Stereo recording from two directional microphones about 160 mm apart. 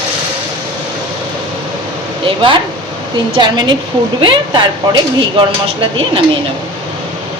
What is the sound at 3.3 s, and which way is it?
A woman's voice, 30° right (ahead or behind).